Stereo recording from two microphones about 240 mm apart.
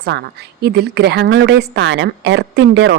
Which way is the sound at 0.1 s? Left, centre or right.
Right.